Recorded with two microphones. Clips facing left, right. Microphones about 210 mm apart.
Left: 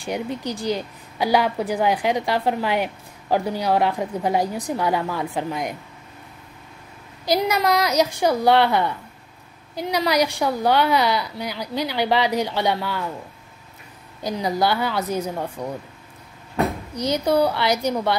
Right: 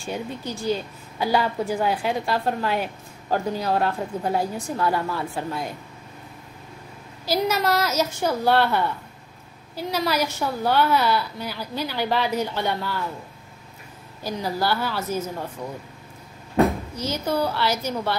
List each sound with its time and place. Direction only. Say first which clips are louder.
0.0 s a woman's voice: left 4 dB; 15° left (ahead or behind)
7.2 s a woman's voice: left 2 dB; 15° left (ahead or behind)
14.2 s a woman's voice: left 4 dB; 15° left (ahead or behind)
15.6 s speech: left 4 dB; 35° left (ahead or behind)
16.9 s a woman's voice: left 5 dB; 15° left (ahead or behind)